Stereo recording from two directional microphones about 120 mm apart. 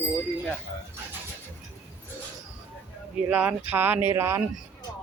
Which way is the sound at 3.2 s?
10° right (ahead or behind).